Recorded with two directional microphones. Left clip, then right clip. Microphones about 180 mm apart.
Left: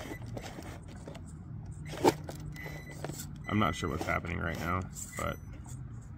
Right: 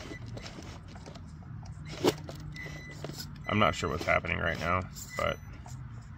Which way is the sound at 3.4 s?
30° right (ahead or behind).